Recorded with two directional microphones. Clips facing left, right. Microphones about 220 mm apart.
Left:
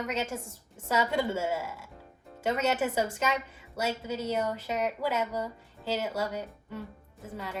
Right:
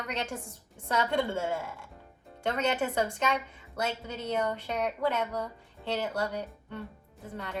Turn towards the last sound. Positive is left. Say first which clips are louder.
# even
turn(degrees=5)  # may be behind; listen again after turning